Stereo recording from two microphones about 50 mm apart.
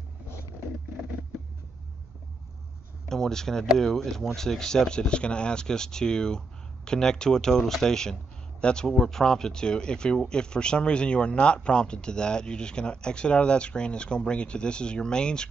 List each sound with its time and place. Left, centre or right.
3.1 s speech: centre